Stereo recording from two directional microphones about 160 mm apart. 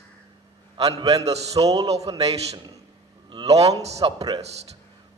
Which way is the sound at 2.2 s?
40° right (ahead or behind).